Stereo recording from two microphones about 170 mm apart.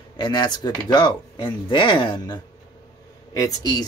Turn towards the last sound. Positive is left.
turn(degrees=20)  # may be behind; listen again after turning